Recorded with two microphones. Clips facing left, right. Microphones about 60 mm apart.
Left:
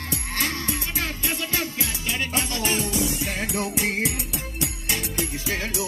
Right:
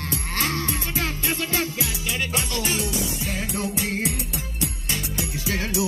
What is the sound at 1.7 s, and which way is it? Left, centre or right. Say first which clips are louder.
Music: even; left.